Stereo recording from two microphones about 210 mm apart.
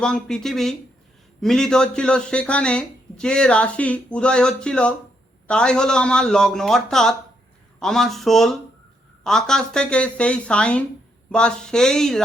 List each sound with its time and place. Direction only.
0.0 s speech: 5° left (ahead or behind)